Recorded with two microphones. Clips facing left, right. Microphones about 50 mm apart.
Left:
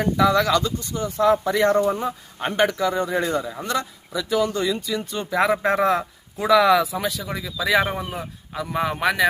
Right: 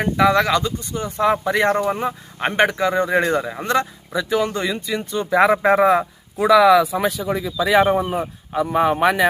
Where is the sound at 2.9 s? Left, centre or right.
Right.